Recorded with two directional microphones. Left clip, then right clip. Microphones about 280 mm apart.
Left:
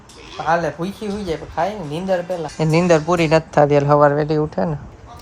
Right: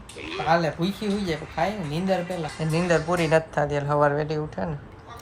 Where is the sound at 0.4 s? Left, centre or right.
Centre.